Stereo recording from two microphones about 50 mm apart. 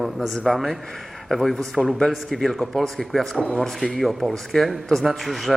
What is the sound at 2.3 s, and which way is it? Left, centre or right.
Speech, centre.